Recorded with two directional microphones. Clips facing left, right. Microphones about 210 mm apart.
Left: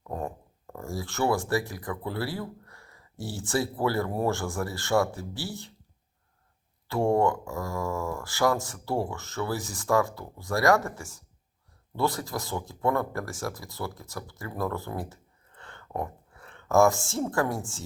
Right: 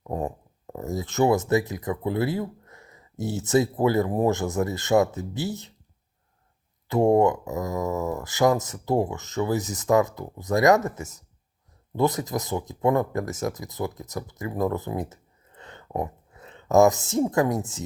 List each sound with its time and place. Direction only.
0.0 s speech: 15° right (ahead or behind)
6.8 s speech: 20° right (ahead or behind)